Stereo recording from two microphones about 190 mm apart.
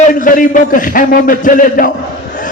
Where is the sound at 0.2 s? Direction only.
45° left (ahead or behind).